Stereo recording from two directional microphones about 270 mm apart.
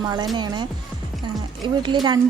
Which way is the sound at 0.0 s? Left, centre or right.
Centre.